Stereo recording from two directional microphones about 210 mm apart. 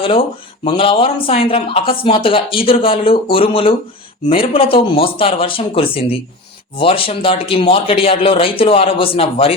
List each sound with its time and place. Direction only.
0.6 s speech: 25° left (ahead or behind)